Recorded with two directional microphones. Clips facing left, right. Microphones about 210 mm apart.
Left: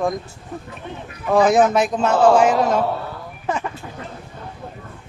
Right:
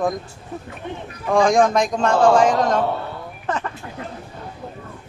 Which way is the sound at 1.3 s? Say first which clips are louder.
Left 1 dB; 5° left (ahead or behind).